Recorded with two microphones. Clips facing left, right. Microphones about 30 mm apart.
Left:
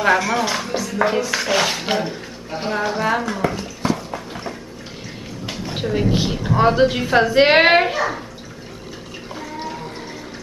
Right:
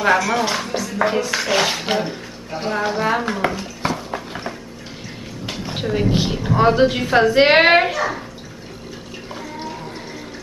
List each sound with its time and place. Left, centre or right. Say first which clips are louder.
0.0 s a woman's voice: even; centre
3.9 s a sound: left 1 dB; centre
5.5 s a woman's voice: even; centre